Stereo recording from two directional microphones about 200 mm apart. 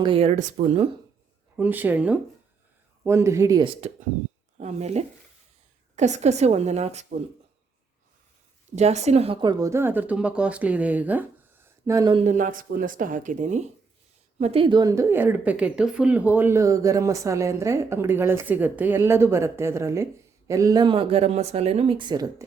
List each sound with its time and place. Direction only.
0.0 s a woman's voice: 30° right (ahead or behind)
1.5 s a woman's voice: 10° right (ahead or behind); by 7.2 s 35° right (ahead or behind)
8.7 s a woman's voice: 35° right (ahead or behind); by 12.1 s 15° right (ahead or behind)
12.1 s a woman's voice: 40° right (ahead or behind); by 22.4 s 20° right (ahead or behind)